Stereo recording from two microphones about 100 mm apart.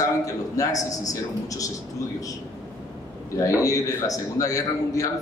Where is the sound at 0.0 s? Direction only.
35° left (ahead or behind).